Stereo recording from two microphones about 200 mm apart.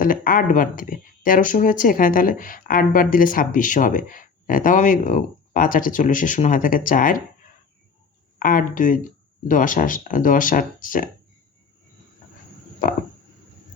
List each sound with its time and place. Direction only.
0.0 s speech: 45° left (ahead or behind)
8.4 s speech: 45° left (ahead or behind)